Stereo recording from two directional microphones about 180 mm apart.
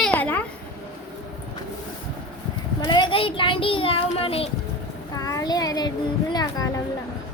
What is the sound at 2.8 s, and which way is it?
A child's voice, 25° left (ahead or behind).